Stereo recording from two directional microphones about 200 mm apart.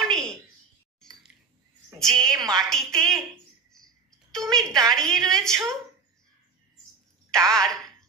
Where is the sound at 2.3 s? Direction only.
15° right (ahead or behind).